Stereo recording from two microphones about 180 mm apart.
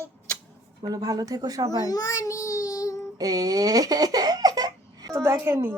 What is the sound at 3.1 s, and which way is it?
Giggle, 20° right (ahead or behind).